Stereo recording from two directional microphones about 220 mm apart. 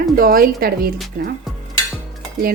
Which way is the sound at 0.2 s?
40° right (ahead or behind).